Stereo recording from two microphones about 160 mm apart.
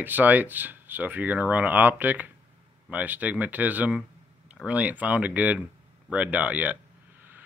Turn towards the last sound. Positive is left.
turn(degrees=-10)  # may be behind; listen again after turning